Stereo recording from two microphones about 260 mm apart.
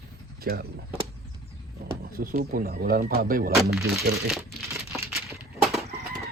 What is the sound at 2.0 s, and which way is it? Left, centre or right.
Speech, right.